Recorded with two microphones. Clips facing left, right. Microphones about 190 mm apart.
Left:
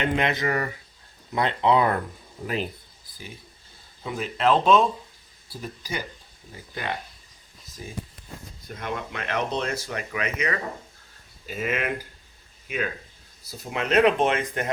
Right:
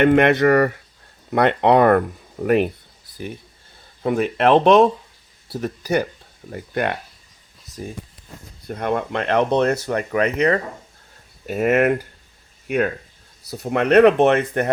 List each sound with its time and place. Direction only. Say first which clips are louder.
0.0 s speech: right 11 dB; 60° right (ahead or behind)
4.0 s speech: right 7 dB; 60° right (ahead or behind)
7.8 s speech: right 5 dB; 50° right (ahead or behind); by 14.7 s 65° right (ahead or behind)